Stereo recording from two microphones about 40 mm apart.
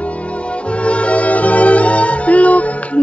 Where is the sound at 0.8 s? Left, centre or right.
Left.